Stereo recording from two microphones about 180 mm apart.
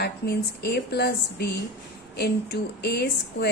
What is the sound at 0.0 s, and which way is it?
A woman's voice, 65° left (ahead or behind).